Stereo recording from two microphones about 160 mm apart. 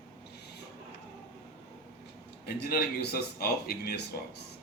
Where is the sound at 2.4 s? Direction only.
75° left (ahead or behind).